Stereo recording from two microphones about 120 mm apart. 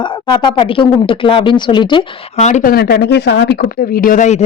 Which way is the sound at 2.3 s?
70° left (ahead or behind).